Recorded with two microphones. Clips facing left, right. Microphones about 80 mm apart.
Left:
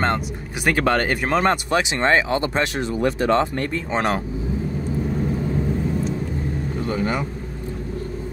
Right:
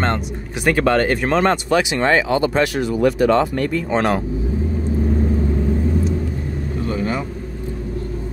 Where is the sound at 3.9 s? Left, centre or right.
Centre.